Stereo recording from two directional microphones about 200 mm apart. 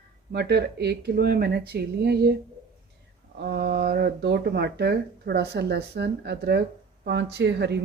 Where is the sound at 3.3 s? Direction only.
55° right (ahead or behind).